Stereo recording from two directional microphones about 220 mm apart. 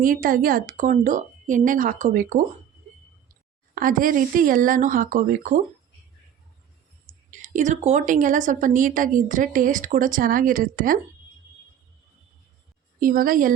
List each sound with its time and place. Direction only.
0.0 s a woman's voice: 40° right (ahead or behind)
3.8 s a woman's voice: 40° right (ahead or behind)
7.3 s a woman's voice: 35° right (ahead or behind)
13.0 s a woman's voice: 40° right (ahead or behind)